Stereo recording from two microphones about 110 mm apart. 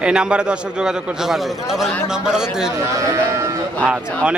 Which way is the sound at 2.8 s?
30° right (ahead or behind).